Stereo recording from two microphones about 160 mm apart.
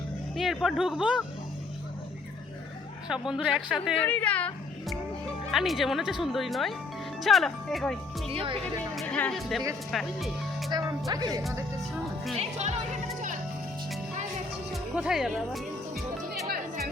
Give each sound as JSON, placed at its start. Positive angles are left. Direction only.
{"t": 0.3, "sound": "speech", "side_deg": 0}
{"t": 3.1, "sound": "speech", "side_deg": -5}
{"t": 4.0, "sound": "speech", "side_deg": 10}
{"t": 8.3, "sound": "speech", "side_deg": -35}
{"t": 8.6, "sound": "speech", "side_deg": 10}
{"t": 10.7, "sound": "speech", "side_deg": -25}
{"t": 11.8, "sound": "speech", "side_deg": 0}
{"t": 12.4, "sound": "speech", "side_deg": -45}
{"t": 14.7, "sound": "music", "side_deg": -5}
{"t": 16.5, "sound": "music", "side_deg": -70}